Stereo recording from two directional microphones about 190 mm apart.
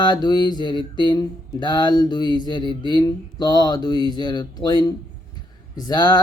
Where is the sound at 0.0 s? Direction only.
20° left (ahead or behind).